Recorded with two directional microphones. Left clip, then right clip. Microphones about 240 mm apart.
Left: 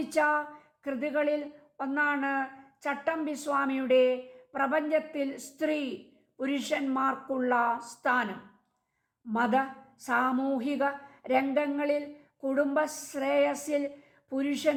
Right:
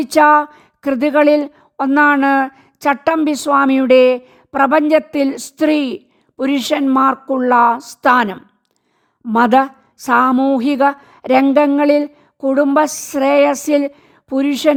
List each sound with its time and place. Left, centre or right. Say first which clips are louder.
0.0 s speech: right 17 dB; right